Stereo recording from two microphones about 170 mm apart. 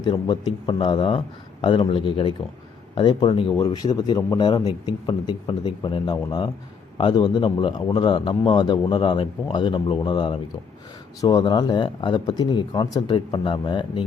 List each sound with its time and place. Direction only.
0.0 s a man's voice: 25° left (ahead or behind)